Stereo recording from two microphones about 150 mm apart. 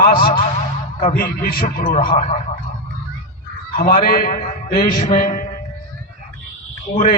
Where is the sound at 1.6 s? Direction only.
55° left (ahead or behind).